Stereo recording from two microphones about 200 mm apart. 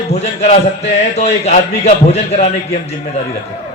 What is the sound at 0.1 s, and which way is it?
A man's voice, 35° left (ahead or behind).